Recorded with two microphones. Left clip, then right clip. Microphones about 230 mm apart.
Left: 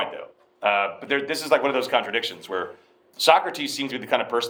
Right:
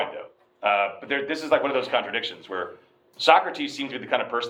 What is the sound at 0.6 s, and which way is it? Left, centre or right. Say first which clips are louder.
Speech: left 1 dB; left.